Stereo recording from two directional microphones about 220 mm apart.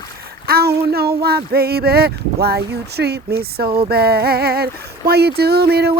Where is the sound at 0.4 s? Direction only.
45° right (ahead or behind).